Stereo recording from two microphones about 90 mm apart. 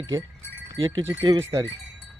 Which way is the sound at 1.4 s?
35° right (ahead or behind).